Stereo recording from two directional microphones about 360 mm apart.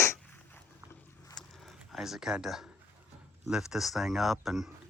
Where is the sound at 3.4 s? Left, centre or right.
Centre.